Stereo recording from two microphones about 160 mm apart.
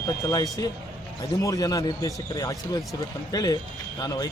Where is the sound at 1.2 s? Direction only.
20° left (ahead or behind).